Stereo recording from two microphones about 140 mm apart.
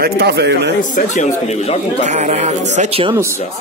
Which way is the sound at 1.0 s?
65° left (ahead or behind).